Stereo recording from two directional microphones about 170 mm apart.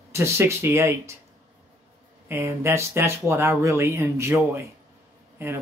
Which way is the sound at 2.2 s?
15° right (ahead or behind).